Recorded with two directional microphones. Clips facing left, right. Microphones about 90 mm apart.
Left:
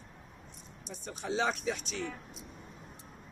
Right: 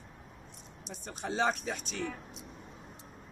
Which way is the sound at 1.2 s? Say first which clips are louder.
Right 1 dB; 50° right (ahead or behind).